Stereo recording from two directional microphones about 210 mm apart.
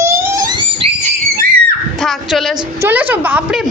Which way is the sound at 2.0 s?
Centre (ahead or behind).